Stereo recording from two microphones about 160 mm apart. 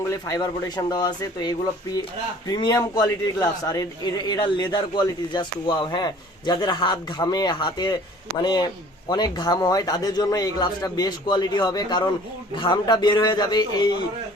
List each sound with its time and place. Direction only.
0.3 s a man's voice: 25° left (ahead or behind)